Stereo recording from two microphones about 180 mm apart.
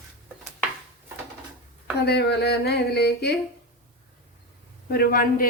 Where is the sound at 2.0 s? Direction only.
65° left (ahead or behind).